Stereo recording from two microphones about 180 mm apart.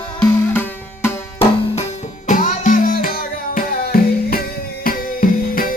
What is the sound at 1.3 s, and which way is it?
Music, 35° left (ahead or behind).